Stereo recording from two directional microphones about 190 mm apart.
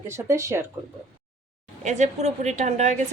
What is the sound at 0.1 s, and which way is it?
Speech, 15° right (ahead or behind).